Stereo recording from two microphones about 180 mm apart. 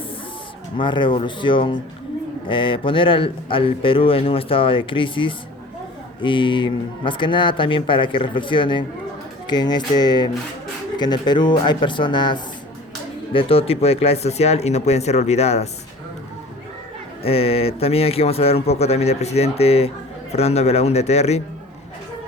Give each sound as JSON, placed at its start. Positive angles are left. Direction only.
{"t": 0.8, "sound": "a man's voice", "side_deg": 25}
{"t": 17.2, "sound": "speech", "side_deg": 30}